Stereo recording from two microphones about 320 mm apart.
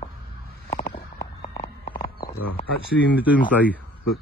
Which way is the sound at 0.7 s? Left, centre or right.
Left.